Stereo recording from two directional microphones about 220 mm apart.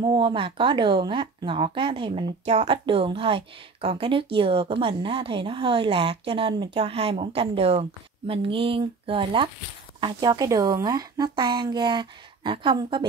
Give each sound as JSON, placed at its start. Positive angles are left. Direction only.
{"t": 0.0, "sound": "speech", "side_deg": -20}